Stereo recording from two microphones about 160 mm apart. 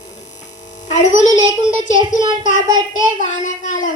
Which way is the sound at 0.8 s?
50° left (ahead or behind).